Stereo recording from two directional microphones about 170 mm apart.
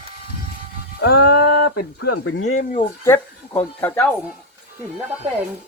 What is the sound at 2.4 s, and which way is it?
Speech, 50° left (ahead or behind).